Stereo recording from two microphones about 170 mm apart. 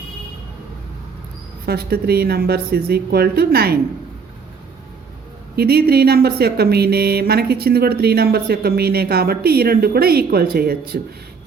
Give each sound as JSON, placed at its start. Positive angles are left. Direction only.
{"t": 1.6, "sound": "a woman's voice", "side_deg": -70}
{"t": 5.5, "sound": "speech", "side_deg": -65}